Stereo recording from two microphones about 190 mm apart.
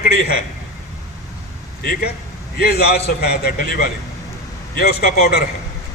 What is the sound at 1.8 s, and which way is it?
A man's voice, 50° left (ahead or behind).